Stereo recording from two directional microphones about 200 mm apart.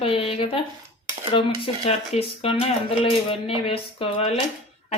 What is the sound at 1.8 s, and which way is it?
Speech, 30° left (ahead or behind).